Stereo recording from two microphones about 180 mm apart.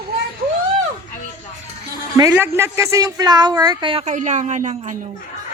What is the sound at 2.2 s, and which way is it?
Speech, 15° right (ahead or behind).